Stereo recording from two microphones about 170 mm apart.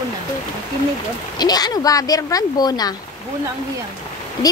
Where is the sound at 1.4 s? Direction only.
25° left (ahead or behind).